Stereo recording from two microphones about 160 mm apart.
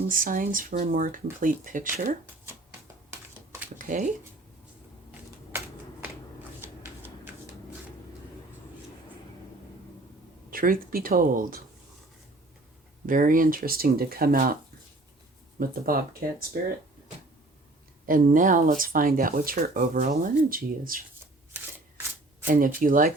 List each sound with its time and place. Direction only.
0.1 s speech: 60° right (ahead or behind)
2.5 s shuffling cards: 15° right (ahead or behind)
3.8 s a sound: 55° right (ahead or behind)
5.5 s finger snapping: 10° right (ahead or behind)
10.5 s speech: 60° right (ahead or behind)
13.1 s speech: 55° right (ahead or behind)
15.5 s speech: 60° right (ahead or behind)
18.0 s speech: 60° right (ahead or behind)
21.5 s shuffling cards: 10° right (ahead or behind)
22.4 s speech: 60° right (ahead or behind)